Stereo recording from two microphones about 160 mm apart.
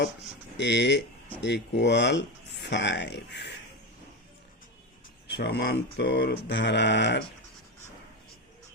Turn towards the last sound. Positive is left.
turn(degrees=90)